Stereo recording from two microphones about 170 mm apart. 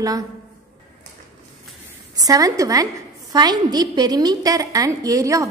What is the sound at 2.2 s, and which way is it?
A woman's voice, 20° right (ahead or behind).